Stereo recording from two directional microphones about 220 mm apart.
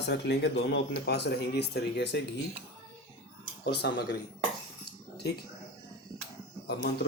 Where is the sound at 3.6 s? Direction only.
50° left (ahead or behind).